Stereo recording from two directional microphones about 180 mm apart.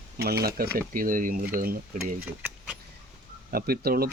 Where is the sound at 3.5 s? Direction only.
60° right (ahead or behind).